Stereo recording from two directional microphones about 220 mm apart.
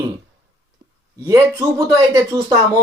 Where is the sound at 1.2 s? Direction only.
15° right (ahead or behind).